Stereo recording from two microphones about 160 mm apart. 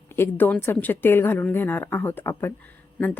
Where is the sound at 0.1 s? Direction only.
15° left (ahead or behind).